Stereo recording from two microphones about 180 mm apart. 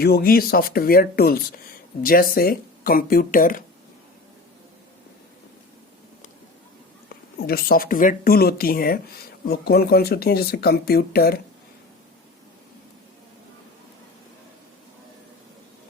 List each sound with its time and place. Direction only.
0.0 s speech: 55° left (ahead or behind)
7.4 s speech: 55° left (ahead or behind)